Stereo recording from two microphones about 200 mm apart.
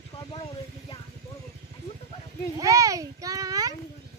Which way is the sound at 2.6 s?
15° right (ahead or behind).